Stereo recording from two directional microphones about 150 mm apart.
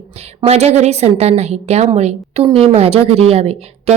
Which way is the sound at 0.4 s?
45° right (ahead or behind).